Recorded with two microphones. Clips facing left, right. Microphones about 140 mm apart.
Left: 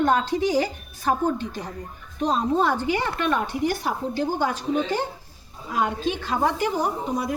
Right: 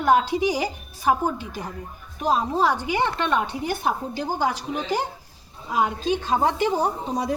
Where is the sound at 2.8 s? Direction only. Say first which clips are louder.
Even; 15° right (ahead or behind).